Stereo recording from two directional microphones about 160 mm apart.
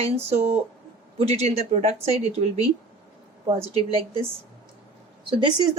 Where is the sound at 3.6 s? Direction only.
35° right (ahead or behind).